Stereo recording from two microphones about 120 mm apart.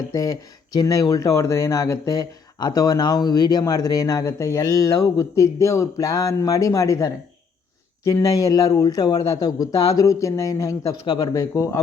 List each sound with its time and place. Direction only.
0.1 s speech: 30° left (ahead or behind)